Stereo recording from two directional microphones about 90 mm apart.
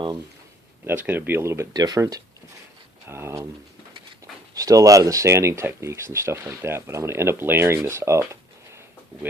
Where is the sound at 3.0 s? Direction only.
30° right (ahead or behind).